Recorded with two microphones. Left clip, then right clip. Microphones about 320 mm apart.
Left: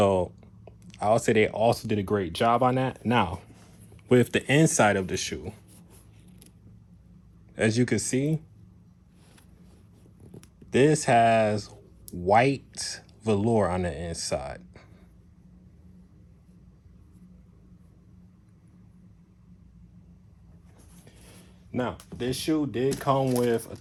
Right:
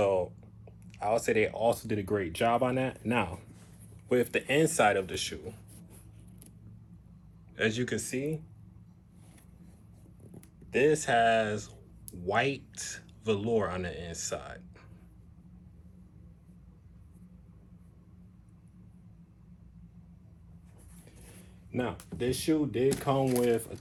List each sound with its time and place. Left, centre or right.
0.0 s speech: left
7.5 s speech: centre
10.7 s speech: left
21.7 s speech: left